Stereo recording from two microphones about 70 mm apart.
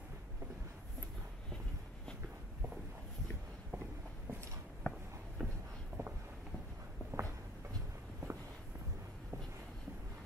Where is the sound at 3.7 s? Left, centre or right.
Right.